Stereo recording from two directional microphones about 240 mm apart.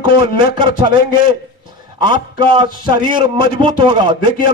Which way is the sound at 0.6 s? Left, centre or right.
Centre.